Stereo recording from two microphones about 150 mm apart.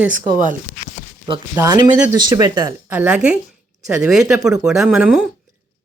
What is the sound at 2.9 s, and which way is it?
Speech, 10° right (ahead or behind).